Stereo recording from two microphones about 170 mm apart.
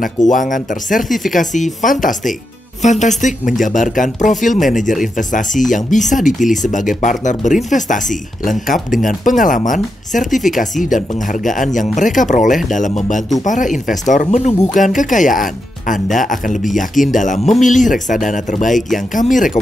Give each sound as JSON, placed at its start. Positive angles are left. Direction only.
{"t": 0.3, "sound": "speech", "side_deg": 50}
{"t": 1.0, "sound": "speech", "side_deg": 0}
{"t": 1.3, "sound": "speech", "side_deg": 50}
{"t": 18.8, "sound": "speech", "side_deg": 0}
{"t": 19.1, "sound": "speech", "side_deg": 50}